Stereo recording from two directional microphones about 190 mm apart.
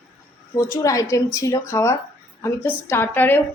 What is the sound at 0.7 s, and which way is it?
A woman's voice, 15° left (ahead or behind).